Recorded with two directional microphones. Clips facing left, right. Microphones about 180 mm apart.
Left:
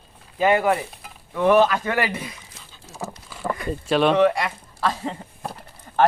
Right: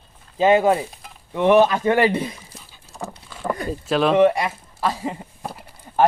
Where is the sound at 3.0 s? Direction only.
5° left (ahead or behind).